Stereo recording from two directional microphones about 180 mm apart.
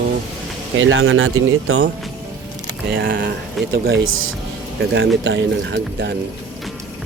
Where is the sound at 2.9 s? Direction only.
55° right (ahead or behind).